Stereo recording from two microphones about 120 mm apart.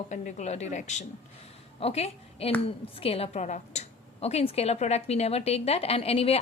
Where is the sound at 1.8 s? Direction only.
60° left (ahead or behind).